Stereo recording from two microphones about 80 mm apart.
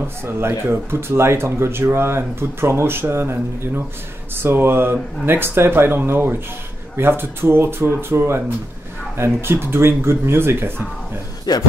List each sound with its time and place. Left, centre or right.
0.2 s speech: right
11.5 s speech: left